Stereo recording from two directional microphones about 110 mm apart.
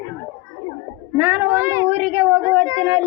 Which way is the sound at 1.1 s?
20° right (ahead or behind).